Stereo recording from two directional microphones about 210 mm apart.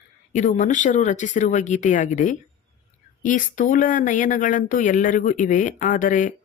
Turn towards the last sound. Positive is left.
turn(degrees=40)  # may be behind; listen again after turning